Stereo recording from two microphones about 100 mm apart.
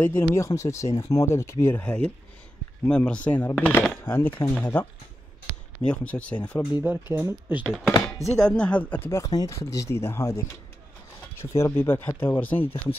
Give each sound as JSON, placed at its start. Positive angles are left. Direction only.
{"t": 0.0, "sound": "speech", "side_deg": 25}
{"t": 5.9, "sound": "speech", "side_deg": 10}
{"t": 6.8, "sound": "speech", "side_deg": -20}
{"t": 8.4, "sound": "speech", "side_deg": 10}
{"t": 9.2, "sound": "speech", "side_deg": 40}